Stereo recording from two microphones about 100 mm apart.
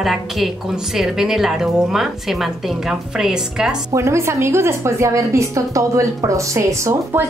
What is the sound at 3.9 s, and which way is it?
A woman's voice, 30° right (ahead or behind).